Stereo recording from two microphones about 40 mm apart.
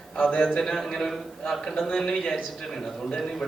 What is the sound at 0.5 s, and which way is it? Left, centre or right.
A man's voice, centre.